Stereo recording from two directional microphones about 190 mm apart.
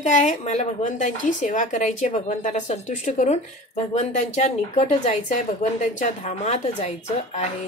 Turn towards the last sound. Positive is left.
turn(degrees=35)  # may be behind; listen again after turning